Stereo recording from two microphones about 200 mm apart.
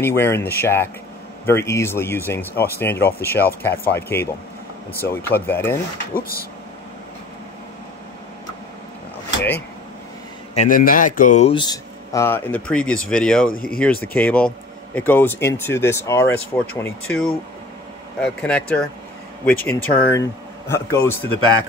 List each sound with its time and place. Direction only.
0.0 s speech: 10° left (ahead or behind)
6.1 s speech: 45° left (ahead or behind)
10.5 s a man's voice: 40° left (ahead or behind)
11.5 s speech: 20° left (ahead or behind); by 13.5 s 5° left (ahead or behind)
13.5 s speech: 45° left (ahead or behind)
13.7 s speech: 10° left (ahead or behind)